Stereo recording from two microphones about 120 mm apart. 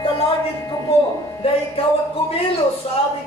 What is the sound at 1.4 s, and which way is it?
Speech, 50° left (ahead or behind).